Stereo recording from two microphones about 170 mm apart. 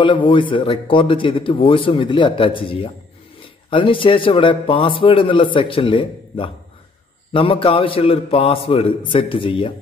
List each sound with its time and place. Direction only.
0.0 s a man's voice: 30° left (ahead or behind)